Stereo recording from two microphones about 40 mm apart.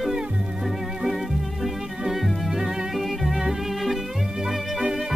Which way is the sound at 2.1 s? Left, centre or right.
Centre.